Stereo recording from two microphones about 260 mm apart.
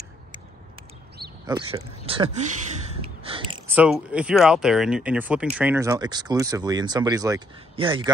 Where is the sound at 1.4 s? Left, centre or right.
Centre.